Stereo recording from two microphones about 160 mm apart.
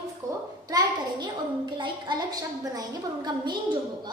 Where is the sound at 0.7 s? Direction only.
25° right (ahead or behind).